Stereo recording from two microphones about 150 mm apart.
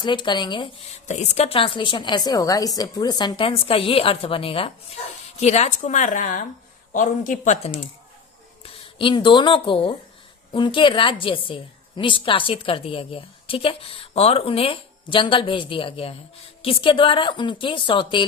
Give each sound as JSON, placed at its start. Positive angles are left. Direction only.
{"t": 0.0, "sound": "a woman's voice", "side_deg": 30}
{"t": 1.0, "sound": "a woman's voice", "side_deg": 50}
{"t": 8.6, "sound": "a woman's voice", "side_deg": 35}